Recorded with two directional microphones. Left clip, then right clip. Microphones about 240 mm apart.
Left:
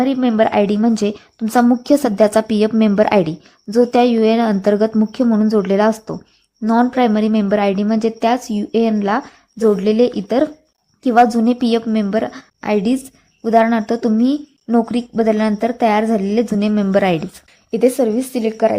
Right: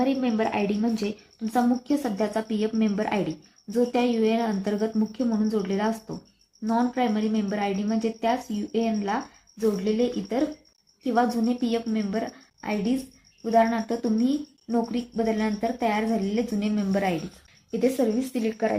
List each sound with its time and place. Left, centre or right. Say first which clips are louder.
0.0 s a woman's voice: left 10 dB; left